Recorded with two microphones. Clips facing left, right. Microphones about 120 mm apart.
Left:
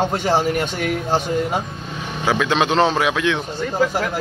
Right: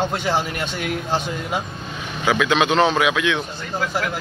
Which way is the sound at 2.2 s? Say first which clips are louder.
Even; 30° left (ahead or behind).